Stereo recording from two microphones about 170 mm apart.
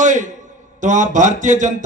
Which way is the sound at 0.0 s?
45° right (ahead or behind).